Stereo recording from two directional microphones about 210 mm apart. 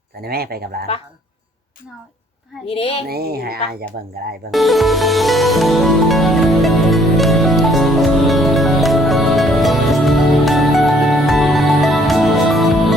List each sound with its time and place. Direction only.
0.2 s speech: 45° right (ahead or behind)
2.6 s speech: 30° left (ahead or behind)
3.1 s speech: 50° right (ahead or behind)
4.5 s music: centre (ahead or behind)